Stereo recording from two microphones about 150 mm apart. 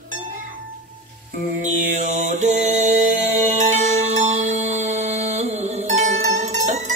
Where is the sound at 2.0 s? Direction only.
55° right (ahead or behind).